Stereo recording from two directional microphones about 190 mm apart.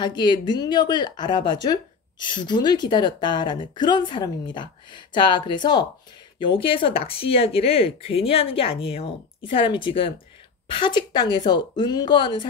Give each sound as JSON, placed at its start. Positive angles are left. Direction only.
{"t": 0.0, "sound": "speech", "side_deg": 25}